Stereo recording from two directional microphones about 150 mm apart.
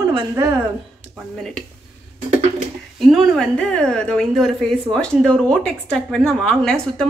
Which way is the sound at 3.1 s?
5° left (ahead or behind).